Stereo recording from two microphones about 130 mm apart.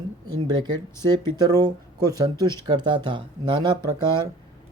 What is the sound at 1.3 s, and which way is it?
Speech, 30° right (ahead or behind).